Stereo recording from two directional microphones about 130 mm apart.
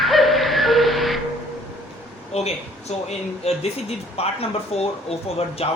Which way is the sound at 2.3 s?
55° left (ahead or behind).